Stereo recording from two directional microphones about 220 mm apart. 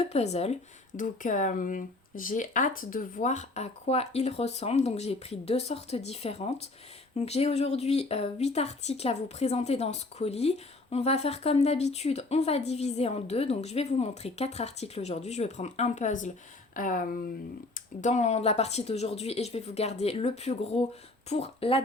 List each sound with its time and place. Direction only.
0.0 s speech: 30° left (ahead or behind)